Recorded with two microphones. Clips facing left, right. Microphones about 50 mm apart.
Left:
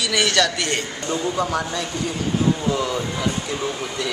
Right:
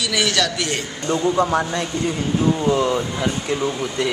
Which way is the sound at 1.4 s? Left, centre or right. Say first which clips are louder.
Right 4 dB; right.